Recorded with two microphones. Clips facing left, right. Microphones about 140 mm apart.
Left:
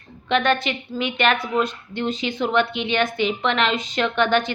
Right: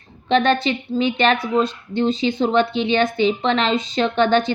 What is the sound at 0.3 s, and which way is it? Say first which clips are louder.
A woman's voice: right 3 dB; 30° right (ahead or behind).